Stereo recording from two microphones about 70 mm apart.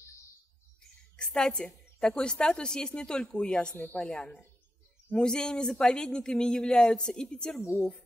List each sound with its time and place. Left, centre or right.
1.1 s a woman's voice: centre
3.7 s a woman's voice: left
4.0 s a woman's voice: centre